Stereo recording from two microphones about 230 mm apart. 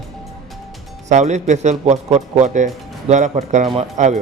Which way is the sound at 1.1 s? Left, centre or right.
Right.